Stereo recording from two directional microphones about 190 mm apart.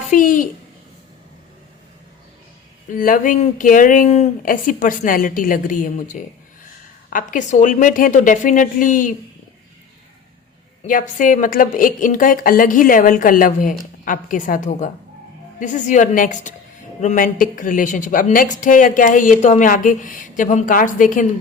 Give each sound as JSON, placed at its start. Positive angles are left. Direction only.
{"t": 0.1, "sound": "a sound", "side_deg": 45}
{"t": 3.0, "sound": "a woman's voice", "side_deg": 45}
{"t": 10.8, "sound": "a woman's voice", "side_deg": 45}